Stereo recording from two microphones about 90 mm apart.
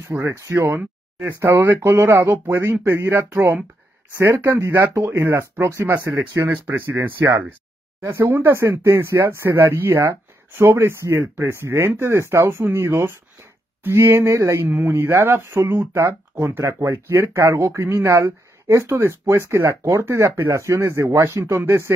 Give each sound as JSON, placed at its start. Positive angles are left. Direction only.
{"t": 0.1, "sound": "speech", "side_deg": -30}
{"t": 6.5, "sound": "speech", "side_deg": -20}